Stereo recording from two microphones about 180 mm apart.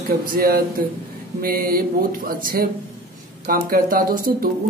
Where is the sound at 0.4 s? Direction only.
55° right (ahead or behind).